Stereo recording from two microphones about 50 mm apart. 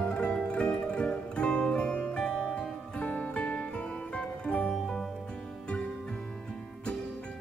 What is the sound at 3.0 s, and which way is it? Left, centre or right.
Music, left.